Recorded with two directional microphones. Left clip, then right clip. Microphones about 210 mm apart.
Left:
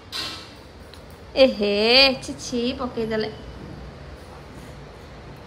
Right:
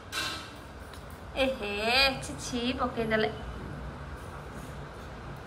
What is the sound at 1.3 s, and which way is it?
Speech, 40° left (ahead or behind).